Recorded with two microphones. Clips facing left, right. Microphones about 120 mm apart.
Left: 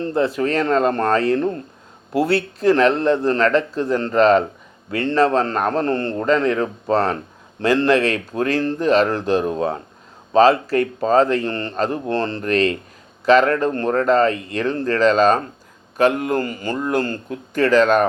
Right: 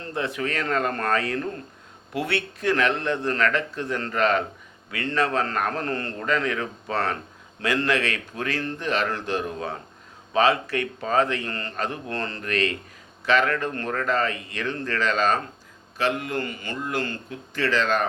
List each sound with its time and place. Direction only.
0.0 s a man's voice: 35° left (ahead or behind); by 18.0 s 50° left (ahead or behind)